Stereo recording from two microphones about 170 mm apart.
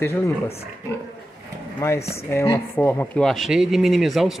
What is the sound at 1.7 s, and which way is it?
Speech, 15° left (ahead or behind).